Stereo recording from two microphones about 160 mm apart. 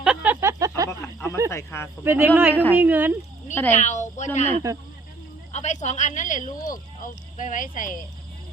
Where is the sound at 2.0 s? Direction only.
15° right (ahead or behind).